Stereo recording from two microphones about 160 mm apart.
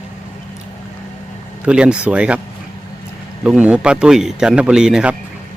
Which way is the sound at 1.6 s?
5° right (ahead or behind).